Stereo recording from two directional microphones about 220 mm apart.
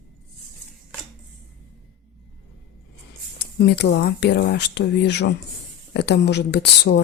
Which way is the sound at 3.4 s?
50° left (ahead or behind).